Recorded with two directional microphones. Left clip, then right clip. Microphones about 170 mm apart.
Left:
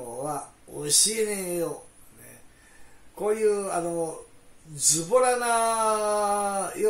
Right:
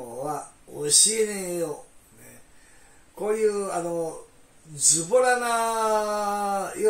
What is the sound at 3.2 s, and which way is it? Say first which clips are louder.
Speech: even; 20° left (ahead or behind).